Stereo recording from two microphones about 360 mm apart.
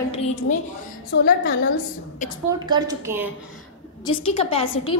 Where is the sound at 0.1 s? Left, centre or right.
Centre.